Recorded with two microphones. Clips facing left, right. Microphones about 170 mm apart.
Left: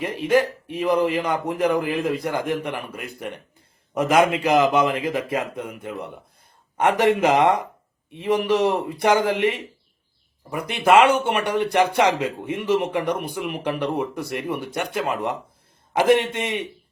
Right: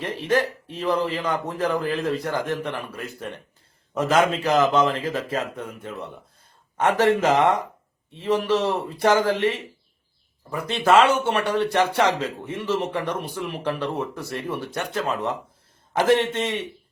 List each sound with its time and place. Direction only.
0.0 s a man's voice: 10° left (ahead or behind)